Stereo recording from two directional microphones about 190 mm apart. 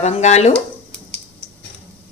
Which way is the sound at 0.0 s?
35° left (ahead or behind).